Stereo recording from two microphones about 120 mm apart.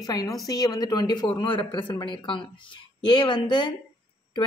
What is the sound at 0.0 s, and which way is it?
Speech, 30° left (ahead or behind).